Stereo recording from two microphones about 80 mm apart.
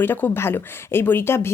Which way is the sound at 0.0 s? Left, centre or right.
Left.